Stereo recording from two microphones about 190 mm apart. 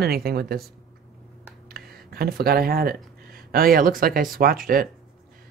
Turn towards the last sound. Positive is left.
turn(degrees=-50)  # may be behind; listen again after turning